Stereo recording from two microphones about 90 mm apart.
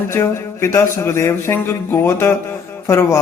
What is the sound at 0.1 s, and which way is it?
Speech, 30° left (ahead or behind).